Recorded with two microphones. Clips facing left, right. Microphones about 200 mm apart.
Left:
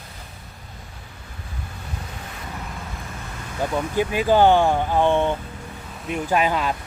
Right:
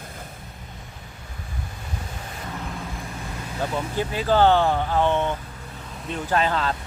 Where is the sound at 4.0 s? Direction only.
15° left (ahead or behind).